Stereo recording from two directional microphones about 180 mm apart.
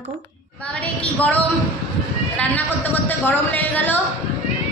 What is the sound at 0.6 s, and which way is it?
A woman's voice, 5° left (ahead or behind).